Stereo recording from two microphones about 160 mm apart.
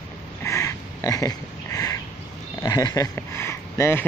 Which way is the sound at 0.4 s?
20° left (ahead or behind).